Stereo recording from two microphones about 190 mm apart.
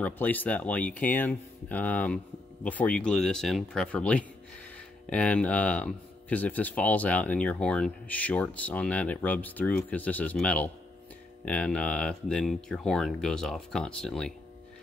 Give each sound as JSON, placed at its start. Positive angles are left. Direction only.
{"t": 0.0, "sound": "speech", "side_deg": 10}